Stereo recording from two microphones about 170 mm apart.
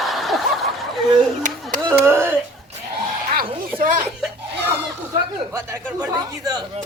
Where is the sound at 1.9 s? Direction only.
15° right (ahead or behind).